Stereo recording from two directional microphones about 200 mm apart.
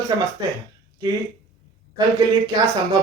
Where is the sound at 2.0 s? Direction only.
20° right (ahead or behind).